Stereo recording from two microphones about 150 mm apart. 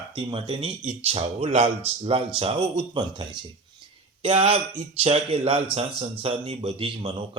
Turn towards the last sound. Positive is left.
turn(degrees=-35)  # may be behind; listen again after turning